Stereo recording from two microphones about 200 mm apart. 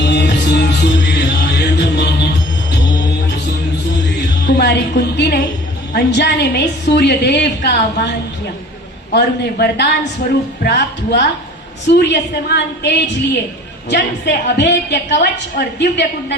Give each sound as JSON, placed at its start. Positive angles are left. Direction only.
{"t": 0.0, "sound": "music", "side_deg": 60}
{"t": 4.4, "sound": "a sound", "side_deg": 60}
{"t": 5.9, "sound": "a woman's voice", "side_deg": 55}
{"t": 9.1, "sound": "a woman's voice", "side_deg": 55}